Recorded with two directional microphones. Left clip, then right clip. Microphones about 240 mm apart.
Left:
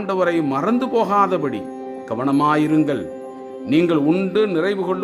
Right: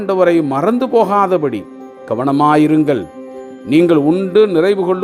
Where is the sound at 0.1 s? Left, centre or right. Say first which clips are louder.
Right 7 dB; right.